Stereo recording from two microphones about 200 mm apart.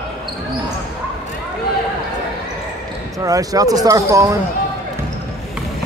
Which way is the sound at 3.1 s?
15° right (ahead or behind).